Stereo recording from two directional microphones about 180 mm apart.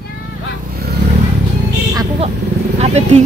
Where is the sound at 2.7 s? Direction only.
35° right (ahead or behind).